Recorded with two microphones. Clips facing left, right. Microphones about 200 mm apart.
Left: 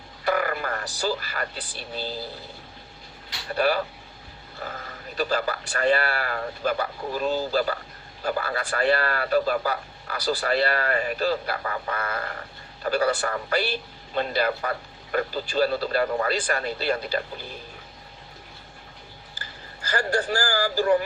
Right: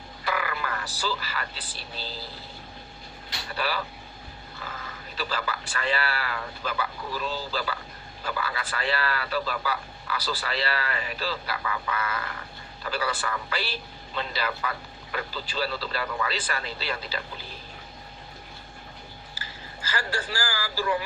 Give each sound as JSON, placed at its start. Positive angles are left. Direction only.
{"t": 0.3, "sound": "frog", "side_deg": 45}
{"t": 3.5, "sound": "speech", "side_deg": 45}
{"t": 19.9, "sound": "speech", "side_deg": 45}